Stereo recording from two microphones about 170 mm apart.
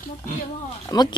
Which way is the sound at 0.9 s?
25° left (ahead or behind).